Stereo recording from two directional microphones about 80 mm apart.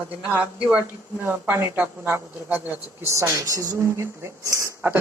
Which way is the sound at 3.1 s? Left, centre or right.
Right.